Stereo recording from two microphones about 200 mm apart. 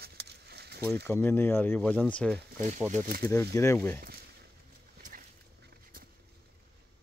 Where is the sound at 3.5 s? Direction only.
15° left (ahead or behind).